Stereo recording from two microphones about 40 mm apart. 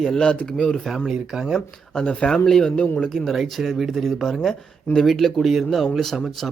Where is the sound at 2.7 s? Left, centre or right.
Left.